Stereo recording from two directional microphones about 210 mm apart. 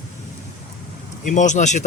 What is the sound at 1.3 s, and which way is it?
Speech, 35° left (ahead or behind).